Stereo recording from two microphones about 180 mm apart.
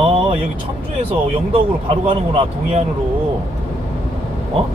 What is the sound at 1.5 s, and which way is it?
Speech, 30° right (ahead or behind).